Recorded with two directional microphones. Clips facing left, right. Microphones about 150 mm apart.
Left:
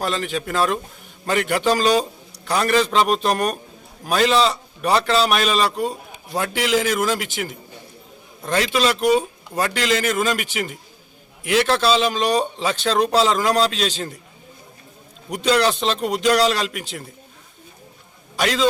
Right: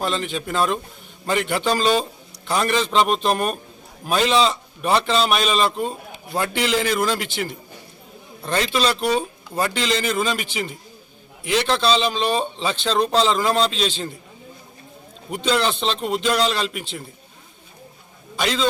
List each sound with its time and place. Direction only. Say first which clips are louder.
0.0 s a man's voice: left 1 dB; centre (ahead or behind)
8.4 s a man's voice: left 1 dB; 5° left (ahead or behind)
11.4 s a man's voice: left 2 dB; 5° left (ahead or behind)
15.4 s a man's voice: left 3 dB; 5° left (ahead or behind)
18.4 s a man's voice: left 3 dB; centre (ahead or behind)